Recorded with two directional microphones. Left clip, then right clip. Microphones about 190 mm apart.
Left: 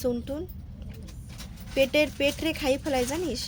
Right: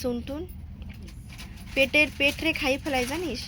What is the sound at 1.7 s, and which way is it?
Speech, 10° left (ahead or behind).